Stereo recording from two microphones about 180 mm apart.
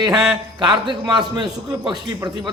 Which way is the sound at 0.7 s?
25° right (ahead or behind).